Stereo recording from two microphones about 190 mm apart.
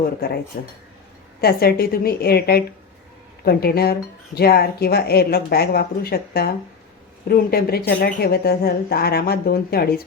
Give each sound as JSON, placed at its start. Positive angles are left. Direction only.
{"t": 0.5, "sound": "a woman's voice", "side_deg": 45}